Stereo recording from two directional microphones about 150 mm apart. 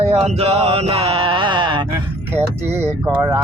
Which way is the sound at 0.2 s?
40° right (ahead or behind).